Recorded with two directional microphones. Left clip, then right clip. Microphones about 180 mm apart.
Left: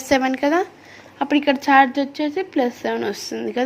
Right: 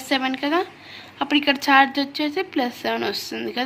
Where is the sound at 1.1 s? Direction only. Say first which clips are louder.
Left 1 dB; 25° left (ahead or behind).